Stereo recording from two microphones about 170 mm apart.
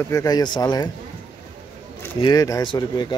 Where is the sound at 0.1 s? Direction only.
20° left (ahead or behind).